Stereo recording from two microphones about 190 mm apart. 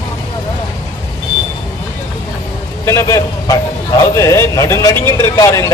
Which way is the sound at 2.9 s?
15° left (ahead or behind).